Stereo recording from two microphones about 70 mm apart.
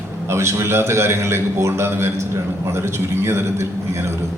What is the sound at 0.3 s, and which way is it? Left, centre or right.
A man's voice, right.